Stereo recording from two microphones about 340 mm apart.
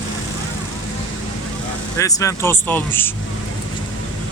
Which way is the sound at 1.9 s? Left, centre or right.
Centre.